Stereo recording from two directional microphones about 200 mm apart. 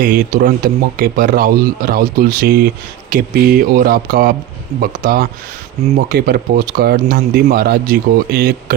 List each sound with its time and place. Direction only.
0.0 s speech: 40° right (ahead or behind)